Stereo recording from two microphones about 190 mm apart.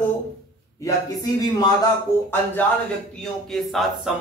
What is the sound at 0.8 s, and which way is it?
Speech, 20° left (ahead or behind).